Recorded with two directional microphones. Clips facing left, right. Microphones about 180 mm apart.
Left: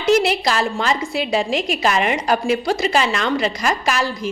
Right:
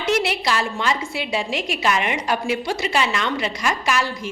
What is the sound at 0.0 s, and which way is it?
A woman's voice, 40° left (ahead or behind).